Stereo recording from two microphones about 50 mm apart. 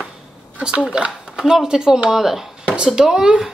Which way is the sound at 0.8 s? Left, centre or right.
Centre.